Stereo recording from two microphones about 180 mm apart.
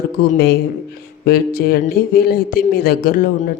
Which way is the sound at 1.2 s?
60° left (ahead or behind).